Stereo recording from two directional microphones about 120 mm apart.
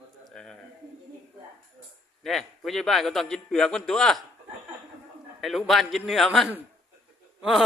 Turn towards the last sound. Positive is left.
turn(degrees=-5)  # may be behind; listen again after turning